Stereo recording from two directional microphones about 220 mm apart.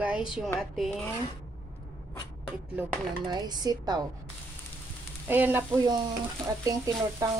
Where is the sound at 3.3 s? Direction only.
20° right (ahead or behind).